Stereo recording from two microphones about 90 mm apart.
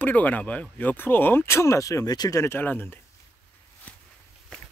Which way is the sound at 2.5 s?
20° left (ahead or behind).